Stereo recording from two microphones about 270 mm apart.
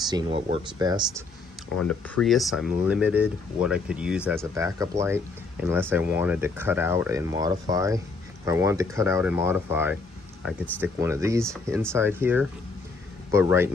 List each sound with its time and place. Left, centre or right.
0.1 s speech: centre
1.9 s speech: centre